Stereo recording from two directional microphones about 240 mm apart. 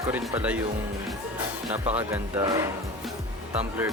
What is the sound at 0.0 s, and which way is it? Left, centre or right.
Speech, centre.